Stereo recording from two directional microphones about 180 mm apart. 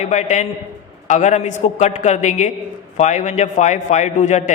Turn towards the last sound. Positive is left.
turn(degrees=40)  # may be behind; listen again after turning